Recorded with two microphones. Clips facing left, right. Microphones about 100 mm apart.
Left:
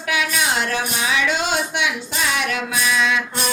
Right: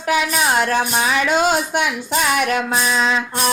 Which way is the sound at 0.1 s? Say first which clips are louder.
Right 4 dB; 45° right (ahead or behind).